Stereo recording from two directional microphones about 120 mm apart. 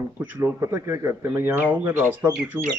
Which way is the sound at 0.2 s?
15° right (ahead or behind).